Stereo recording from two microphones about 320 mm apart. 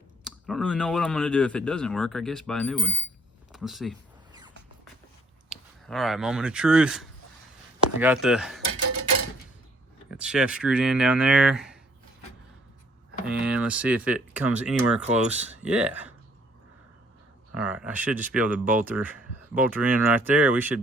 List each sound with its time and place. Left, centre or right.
0.3 s speech: centre
4.3 s a sound: centre
5.5 s speech: centre
10.1 s speech: centre
13.2 s speech: centre
17.5 s speech: centre